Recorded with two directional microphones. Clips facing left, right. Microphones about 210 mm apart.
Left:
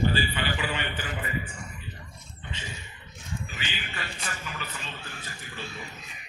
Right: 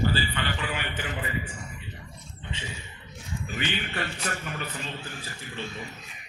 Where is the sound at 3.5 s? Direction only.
60° right (ahead or behind).